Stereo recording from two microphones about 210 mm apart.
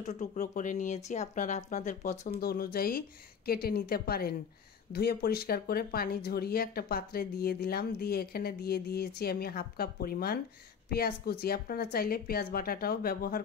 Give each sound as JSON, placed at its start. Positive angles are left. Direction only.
{"t": 0.0, "sound": "speech", "side_deg": 35}